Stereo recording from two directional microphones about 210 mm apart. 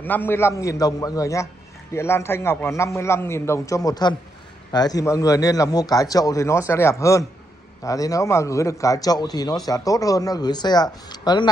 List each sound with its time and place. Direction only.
0.0 s a man's voice: 10° left (ahead or behind)